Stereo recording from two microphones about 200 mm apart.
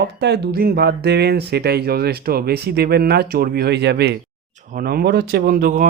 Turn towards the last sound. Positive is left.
turn(degrees=-45)  # may be behind; listen again after turning